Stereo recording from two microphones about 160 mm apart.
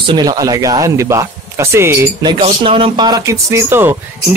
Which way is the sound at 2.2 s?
30° right (ahead or behind).